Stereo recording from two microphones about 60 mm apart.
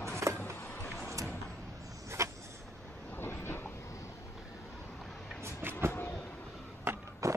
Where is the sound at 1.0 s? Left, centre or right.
Right.